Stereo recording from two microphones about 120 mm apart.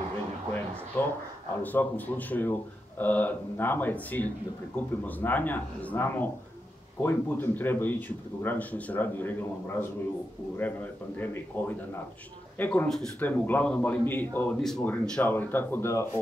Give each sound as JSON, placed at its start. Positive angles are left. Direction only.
{"t": 1.0, "sound": "speech", "side_deg": 15}
{"t": 14.6, "sound": "speech", "side_deg": 5}
{"t": 14.9, "sound": "speech", "side_deg": 15}